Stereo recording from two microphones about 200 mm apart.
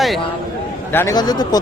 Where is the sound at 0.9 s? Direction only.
15° left (ahead or behind).